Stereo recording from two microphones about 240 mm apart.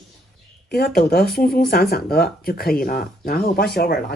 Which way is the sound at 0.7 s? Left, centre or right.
Left.